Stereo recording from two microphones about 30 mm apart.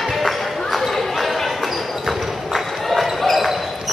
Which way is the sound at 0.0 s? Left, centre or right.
Centre.